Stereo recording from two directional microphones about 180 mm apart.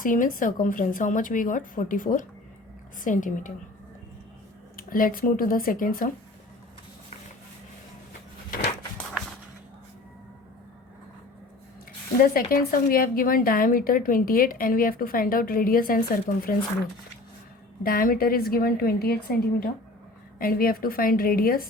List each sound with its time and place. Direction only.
0.0 s a woman's voice: 50° left (ahead or behind)
4.8 s a woman's voice: 50° left (ahead or behind)
8.4 s a sound: 50° left (ahead or behind)
12.2 s a woman's voice: 55° left (ahead or behind)
17.8 s a woman's voice: 55° left (ahead or behind)